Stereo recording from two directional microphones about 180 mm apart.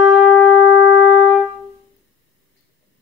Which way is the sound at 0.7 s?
90° left.